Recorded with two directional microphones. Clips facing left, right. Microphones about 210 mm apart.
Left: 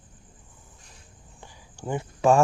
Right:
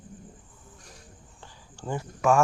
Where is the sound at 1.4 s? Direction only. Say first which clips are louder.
Left 3 dB; 15° left (ahead or behind).